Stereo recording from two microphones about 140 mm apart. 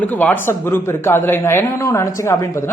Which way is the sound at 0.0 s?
10° left (ahead or behind).